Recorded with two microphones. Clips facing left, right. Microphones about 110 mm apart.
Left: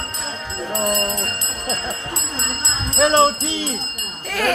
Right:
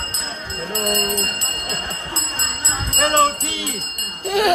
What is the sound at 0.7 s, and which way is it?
Jingle bell, 30° left (ahead or behind).